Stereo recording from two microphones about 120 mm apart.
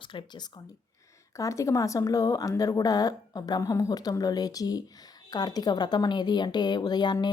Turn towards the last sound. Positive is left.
turn(degrees=40)  # may be behind; listen again after turning